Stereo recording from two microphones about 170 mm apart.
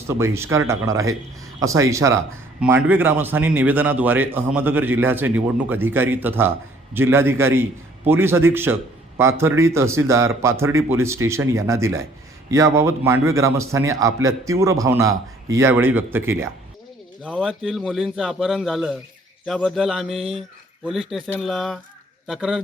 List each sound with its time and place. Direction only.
0.1 s a man's voice: 15° right (ahead or behind)
17.4 s speech: 5° right (ahead or behind)
21.4 s speech: centre (ahead or behind)